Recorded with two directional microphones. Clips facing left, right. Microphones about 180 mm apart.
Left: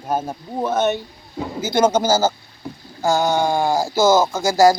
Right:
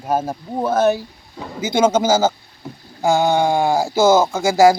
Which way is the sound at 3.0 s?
20° right (ahead or behind).